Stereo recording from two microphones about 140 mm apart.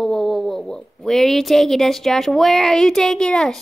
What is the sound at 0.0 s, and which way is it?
Speech, centre (ahead or behind).